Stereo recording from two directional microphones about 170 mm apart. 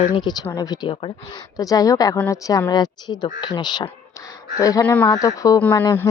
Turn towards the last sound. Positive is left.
turn(degrees=30)  # may be behind; listen again after turning